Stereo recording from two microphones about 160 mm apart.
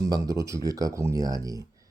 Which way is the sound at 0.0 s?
20° right (ahead or behind).